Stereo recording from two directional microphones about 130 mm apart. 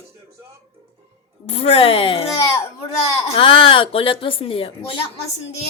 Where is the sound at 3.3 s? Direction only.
45° left (ahead or behind).